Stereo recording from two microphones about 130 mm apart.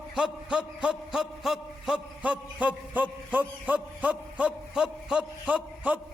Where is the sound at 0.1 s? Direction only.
5° right (ahead or behind).